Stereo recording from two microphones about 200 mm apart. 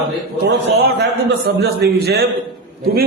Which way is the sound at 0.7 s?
55° right (ahead or behind).